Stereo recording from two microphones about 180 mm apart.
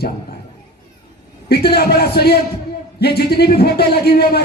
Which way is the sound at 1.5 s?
60° left (ahead or behind).